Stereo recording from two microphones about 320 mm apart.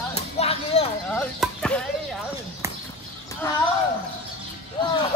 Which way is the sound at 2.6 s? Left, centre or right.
Centre.